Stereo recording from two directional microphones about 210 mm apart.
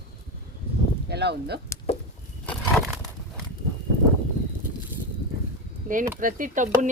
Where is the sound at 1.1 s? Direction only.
50° right (ahead or behind).